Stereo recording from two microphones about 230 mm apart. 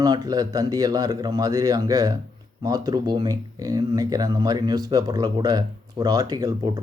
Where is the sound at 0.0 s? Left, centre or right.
Centre.